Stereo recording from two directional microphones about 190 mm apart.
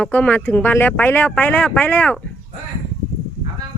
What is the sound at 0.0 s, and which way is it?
Speech, 10° left (ahead or behind).